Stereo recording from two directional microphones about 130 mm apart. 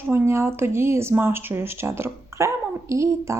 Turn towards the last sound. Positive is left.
turn(degrees=-20)  # may be behind; listen again after turning